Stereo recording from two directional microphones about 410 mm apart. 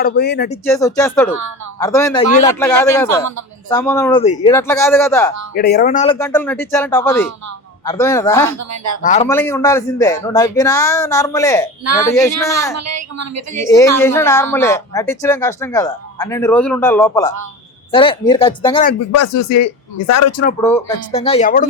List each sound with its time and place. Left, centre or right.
0.0 s speech: left
0.7 s speech: centre
5.5 s speech: left
6.1 s speech: centre
8.5 s a woman's voice: right
9.0 s speech: centre
9.2 s speech: centre
12.7 s a woman's voice: right
14.0 s speech: centre
19.1 s speech: left
20.6 s speech: centre